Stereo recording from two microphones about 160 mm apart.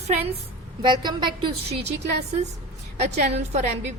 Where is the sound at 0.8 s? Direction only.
30° right (ahead or behind).